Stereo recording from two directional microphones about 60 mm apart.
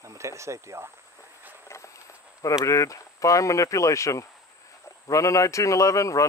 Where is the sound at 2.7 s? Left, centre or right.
Left.